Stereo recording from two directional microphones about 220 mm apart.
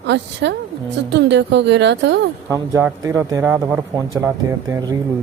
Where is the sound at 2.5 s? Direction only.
15° right (ahead or behind).